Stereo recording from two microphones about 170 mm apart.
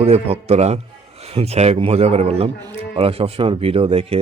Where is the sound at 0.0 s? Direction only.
35° right (ahead or behind).